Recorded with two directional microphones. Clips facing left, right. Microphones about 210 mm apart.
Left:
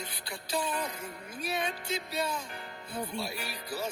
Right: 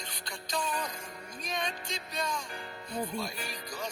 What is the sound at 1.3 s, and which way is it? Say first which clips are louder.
Speech: left 3 dB; 5° left (ahead or behind).